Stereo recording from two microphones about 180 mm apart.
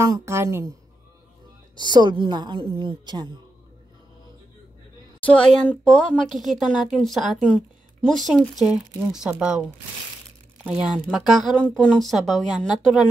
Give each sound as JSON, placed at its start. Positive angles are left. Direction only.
{"t": 0.0, "sound": "speech", "side_deg": -15}
{"t": 1.8, "sound": "a woman's voice", "side_deg": -25}
{"t": 5.2, "sound": "speech", "side_deg": 5}